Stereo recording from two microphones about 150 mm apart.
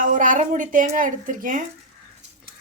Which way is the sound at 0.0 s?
60° right (ahead or behind).